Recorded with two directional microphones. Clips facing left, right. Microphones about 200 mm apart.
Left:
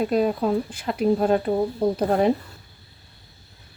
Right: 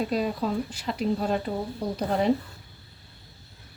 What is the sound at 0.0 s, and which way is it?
Speech, 55° left (ahead or behind).